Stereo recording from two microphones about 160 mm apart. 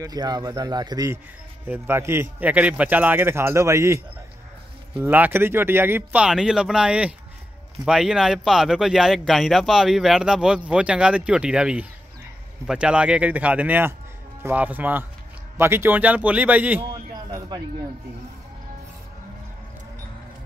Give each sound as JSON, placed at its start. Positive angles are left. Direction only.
{"t": 0.0, "sound": "a man's voice", "side_deg": -25}
{"t": 5.0, "sound": "a man's voice", "side_deg": -10}